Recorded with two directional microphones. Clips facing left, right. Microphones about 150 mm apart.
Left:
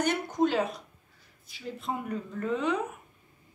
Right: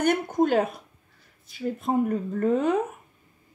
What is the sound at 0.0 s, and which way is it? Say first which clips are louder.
Speech: right 4 dB; 55° right (ahead or behind).